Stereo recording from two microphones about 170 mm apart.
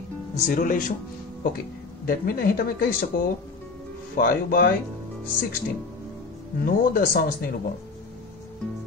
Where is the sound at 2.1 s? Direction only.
65° left (ahead or behind).